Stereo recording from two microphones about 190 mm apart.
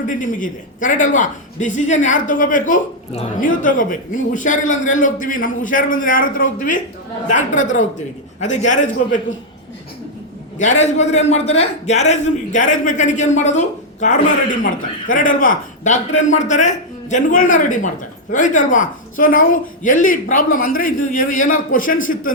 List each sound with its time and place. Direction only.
0.1 s a man's voice: 45° left (ahead or behind)
10.6 s a man's voice: 40° left (ahead or behind)